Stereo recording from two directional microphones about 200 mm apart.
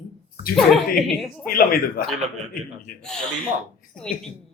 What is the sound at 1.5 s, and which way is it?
Speech, 45° left (ahead or behind).